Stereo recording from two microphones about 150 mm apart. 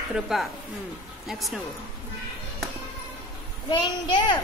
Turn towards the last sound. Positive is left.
turn(degrees=35)  # may be behind; listen again after turning